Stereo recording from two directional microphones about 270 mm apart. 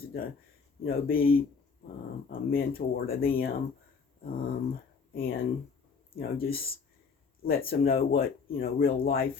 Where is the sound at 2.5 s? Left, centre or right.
Left.